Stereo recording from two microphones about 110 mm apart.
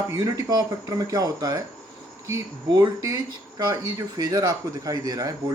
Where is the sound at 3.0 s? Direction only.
35° right (ahead or behind).